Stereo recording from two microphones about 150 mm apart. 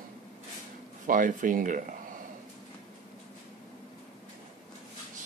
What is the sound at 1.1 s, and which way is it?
Speech, 60° right (ahead or behind).